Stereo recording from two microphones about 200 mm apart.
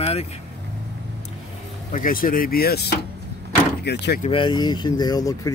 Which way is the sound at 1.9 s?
45° left (ahead or behind).